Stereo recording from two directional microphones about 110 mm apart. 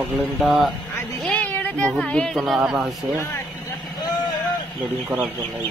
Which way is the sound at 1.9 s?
5° left (ahead or behind).